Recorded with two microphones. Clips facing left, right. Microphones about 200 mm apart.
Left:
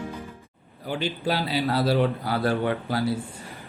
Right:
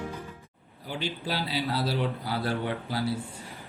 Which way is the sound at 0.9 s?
55° left (ahead or behind).